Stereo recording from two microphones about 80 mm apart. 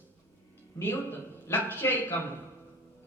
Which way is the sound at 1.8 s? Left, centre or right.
Left.